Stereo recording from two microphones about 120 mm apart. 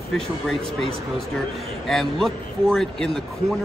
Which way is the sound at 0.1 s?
5° left (ahead or behind).